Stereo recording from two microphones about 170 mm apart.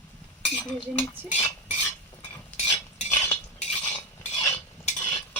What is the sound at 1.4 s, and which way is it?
Stir, 35° left (ahead or behind).